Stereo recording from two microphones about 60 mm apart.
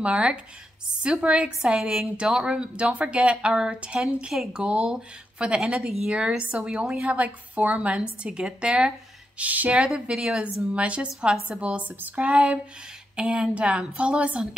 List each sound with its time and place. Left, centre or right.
0.0 s a woman's voice: centre
10.4 s a woman's voice: right